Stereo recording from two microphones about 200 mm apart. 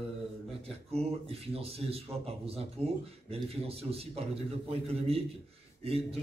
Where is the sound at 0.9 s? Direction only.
30° right (ahead or behind).